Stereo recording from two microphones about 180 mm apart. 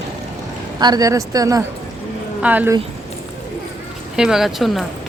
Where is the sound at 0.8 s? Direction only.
20° right (ahead or behind).